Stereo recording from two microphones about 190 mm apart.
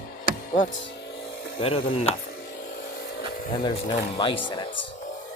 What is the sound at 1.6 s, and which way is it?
Speech, 30° left (ahead or behind).